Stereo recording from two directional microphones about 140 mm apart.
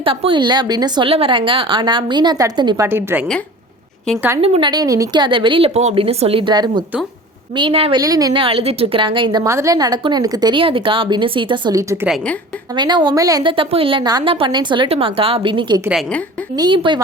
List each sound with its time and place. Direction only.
0.0 s a woman's voice: 40° right (ahead or behind)
2.8 s a woman's voice: 15° right (ahead or behind)
4.4 s a woman's voice: 40° right (ahead or behind)
4.7 s a woman's voice: 25° right (ahead or behind); by 7.9 s 40° right (ahead or behind)
7.9 s a woman's voice: 25° right (ahead or behind)
8.4 s a woman's voice: 40° right (ahead or behind); by 13.5 s 25° right (ahead or behind)
13.5 s a woman's voice: 40° right (ahead or behind)